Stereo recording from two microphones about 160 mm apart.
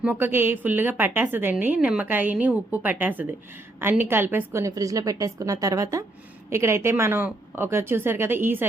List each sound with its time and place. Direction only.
0.0 s a woman's voice: 10° right (ahead or behind)